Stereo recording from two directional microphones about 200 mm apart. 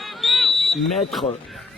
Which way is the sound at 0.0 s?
Centre (ahead or behind).